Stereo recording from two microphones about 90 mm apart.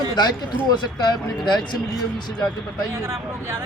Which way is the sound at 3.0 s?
30° right (ahead or behind).